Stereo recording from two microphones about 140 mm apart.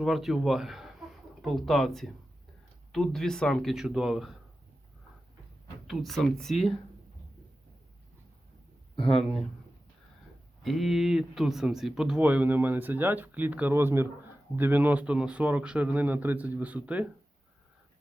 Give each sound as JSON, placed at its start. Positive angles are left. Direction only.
{"t": 0.0, "sound": "speech", "side_deg": 0}
{"t": 5.9, "sound": "speech", "side_deg": 0}
{"t": 9.0, "sound": "speech", "side_deg": 5}
{"t": 10.6, "sound": "speech", "side_deg": 0}